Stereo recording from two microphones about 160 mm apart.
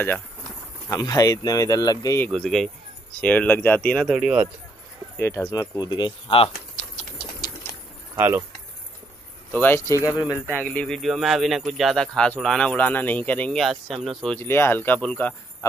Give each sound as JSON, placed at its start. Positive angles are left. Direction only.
{"t": 0.8, "sound": "speech", "side_deg": 20}
{"t": 2.2, "sound": "speech", "side_deg": 5}
{"t": 5.1, "sound": "speech", "side_deg": 15}
{"t": 8.2, "sound": "speech", "side_deg": -10}
{"t": 9.5, "sound": "speech", "side_deg": 10}
{"t": 10.4, "sound": "speech", "side_deg": 10}
{"t": 14.4, "sound": "speech", "side_deg": 15}